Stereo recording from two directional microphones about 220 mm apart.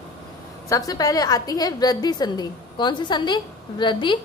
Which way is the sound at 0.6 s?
15° left (ahead or behind).